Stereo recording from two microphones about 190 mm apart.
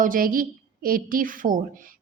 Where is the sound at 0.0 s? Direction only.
45° right (ahead or behind).